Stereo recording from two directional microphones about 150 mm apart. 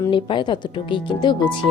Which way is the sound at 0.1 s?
30° left (ahead or behind).